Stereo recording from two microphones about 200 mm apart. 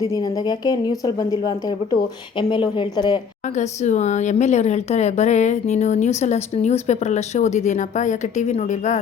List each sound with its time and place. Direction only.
0.1 s a woman's voice: 20° left (ahead or behind)
3.5 s a woman's voice: 35° left (ahead or behind)